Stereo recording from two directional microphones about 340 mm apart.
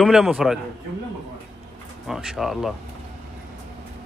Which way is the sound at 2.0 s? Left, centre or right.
Centre.